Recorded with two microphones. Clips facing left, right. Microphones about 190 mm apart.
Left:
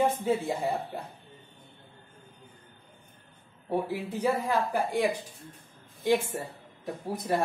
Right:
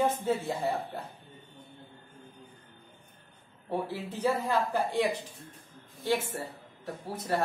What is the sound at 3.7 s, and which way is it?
Speech, 10° left (ahead or behind).